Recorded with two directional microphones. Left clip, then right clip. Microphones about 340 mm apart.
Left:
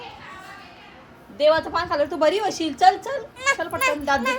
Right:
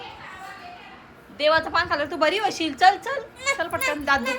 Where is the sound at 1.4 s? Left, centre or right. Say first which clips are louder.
Left 1 dB; centre.